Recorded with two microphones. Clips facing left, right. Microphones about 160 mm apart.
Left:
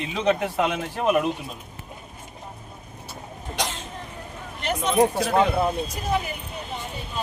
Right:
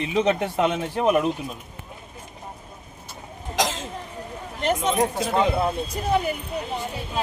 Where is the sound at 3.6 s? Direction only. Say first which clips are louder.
Right 5 dB; 90° right.